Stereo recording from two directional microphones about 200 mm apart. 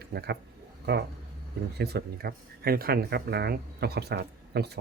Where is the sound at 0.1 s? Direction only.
55° right (ahead or behind).